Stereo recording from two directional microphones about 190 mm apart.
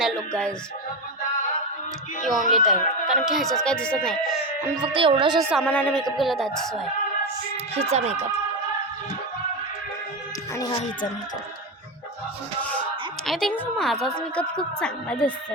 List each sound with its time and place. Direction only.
0.0 s music: 5° left (ahead or behind)
2.5 s speech: centre (ahead or behind)
4.9 s speech: 25° right (ahead or behind)
5.6 s speech: 10° left (ahead or behind)
7.8 s speech: 35° right (ahead or behind)
13.2 s speech: centre (ahead or behind)